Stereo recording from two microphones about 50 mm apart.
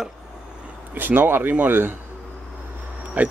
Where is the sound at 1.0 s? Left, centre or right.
Right.